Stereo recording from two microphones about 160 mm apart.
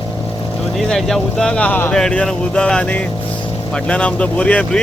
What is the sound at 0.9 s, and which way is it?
Speech, centre (ahead or behind).